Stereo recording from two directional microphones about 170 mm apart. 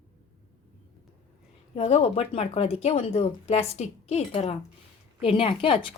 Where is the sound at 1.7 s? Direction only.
35° left (ahead or behind).